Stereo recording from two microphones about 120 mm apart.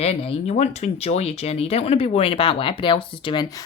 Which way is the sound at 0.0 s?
55° left (ahead or behind).